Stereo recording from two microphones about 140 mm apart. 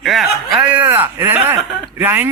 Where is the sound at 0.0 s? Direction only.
Centre (ahead or behind).